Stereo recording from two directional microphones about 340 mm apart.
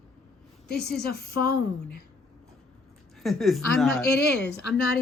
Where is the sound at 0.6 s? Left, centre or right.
Left.